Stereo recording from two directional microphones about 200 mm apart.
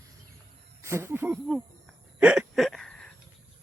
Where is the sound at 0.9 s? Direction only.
15° right (ahead or behind).